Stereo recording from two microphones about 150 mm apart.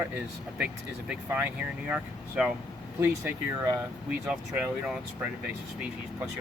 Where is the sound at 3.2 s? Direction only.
20° right (ahead or behind).